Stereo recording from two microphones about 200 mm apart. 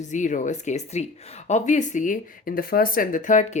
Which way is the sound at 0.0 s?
40° left (ahead or behind).